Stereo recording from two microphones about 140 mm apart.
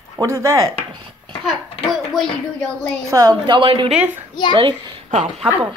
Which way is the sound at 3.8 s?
10° right (ahead or behind).